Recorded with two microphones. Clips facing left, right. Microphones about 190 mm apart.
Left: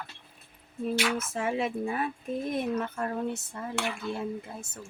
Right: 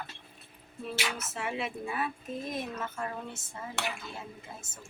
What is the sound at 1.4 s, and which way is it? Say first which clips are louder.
Speech: left 4 dB; 45° left (ahead or behind).